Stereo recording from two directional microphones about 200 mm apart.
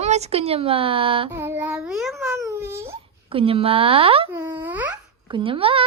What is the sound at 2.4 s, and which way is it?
Speech, 15° right (ahead or behind).